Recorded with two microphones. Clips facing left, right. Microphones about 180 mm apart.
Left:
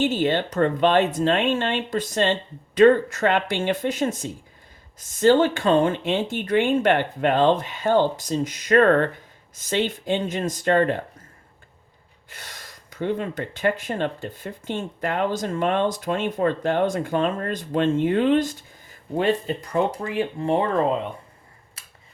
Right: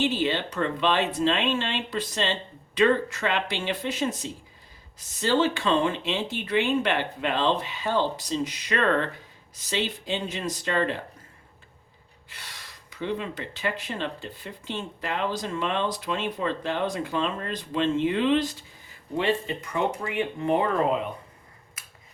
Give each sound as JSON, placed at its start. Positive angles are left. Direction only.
{"t": 0.0, "sound": "speech", "side_deg": 45}
{"t": 12.3, "sound": "speech", "side_deg": 45}